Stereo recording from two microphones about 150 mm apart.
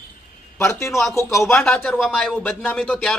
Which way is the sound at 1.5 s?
5° left (ahead or behind).